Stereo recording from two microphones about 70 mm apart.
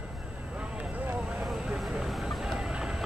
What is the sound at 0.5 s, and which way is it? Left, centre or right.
Vehicle, centre.